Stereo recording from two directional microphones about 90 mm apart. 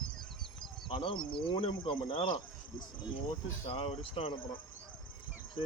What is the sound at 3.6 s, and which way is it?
Speech, 90° left.